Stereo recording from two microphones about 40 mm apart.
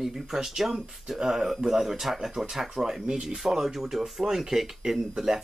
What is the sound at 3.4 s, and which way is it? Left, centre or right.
Speech, centre.